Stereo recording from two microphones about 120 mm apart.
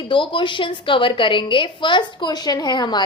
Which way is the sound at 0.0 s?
45° left (ahead or behind).